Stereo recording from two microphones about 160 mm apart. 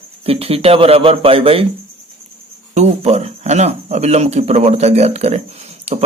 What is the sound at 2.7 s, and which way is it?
A man's voice, 45° right (ahead or behind).